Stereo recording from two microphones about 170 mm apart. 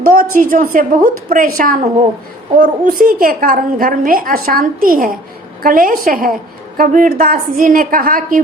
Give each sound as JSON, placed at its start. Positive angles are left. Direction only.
{"t": 0.0, "sound": "a woman's voice", "side_deg": -55}